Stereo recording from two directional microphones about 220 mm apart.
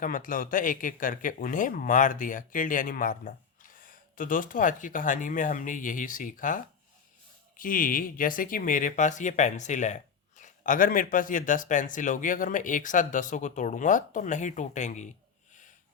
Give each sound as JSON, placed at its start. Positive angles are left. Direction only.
{"t": 0.0, "sound": "speech", "side_deg": 40}